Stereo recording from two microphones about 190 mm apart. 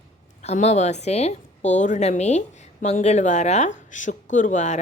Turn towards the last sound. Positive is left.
turn(degrees=40)  # may be behind; listen again after turning